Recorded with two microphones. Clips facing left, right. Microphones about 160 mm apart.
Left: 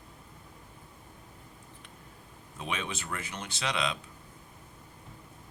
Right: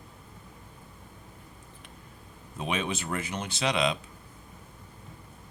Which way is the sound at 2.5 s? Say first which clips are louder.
Right 5 dB; 20° right (ahead or behind).